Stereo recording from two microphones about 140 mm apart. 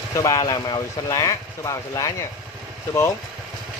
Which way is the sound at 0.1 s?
25° left (ahead or behind).